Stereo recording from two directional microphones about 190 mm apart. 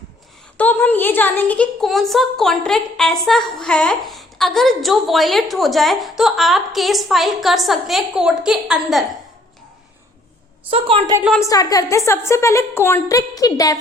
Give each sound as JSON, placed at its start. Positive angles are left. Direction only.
{"t": 0.5, "sound": "a woman's voice", "side_deg": 10}
{"t": 10.7, "sound": "a woman's voice", "side_deg": -30}
{"t": 11.2, "sound": "a woman's voice", "side_deg": 0}
{"t": 11.4, "sound": "a woman's voice", "side_deg": 20}